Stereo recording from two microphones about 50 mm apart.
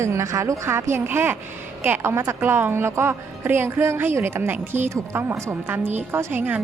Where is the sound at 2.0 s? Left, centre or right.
Right.